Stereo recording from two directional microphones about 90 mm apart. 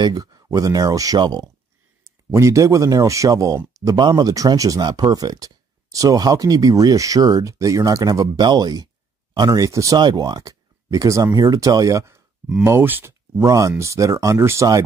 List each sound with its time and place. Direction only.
0.0 s speech: 45° right (ahead or behind)
2.3 s speech: 35° right (ahead or behind)
9.9 s speech: 55° right (ahead or behind)
12.6 s speech: 25° right (ahead or behind)
13.4 s speech: 35° right (ahead or behind)